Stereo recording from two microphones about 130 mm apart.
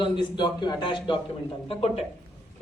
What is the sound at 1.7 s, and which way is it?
Speech, 50° left (ahead or behind).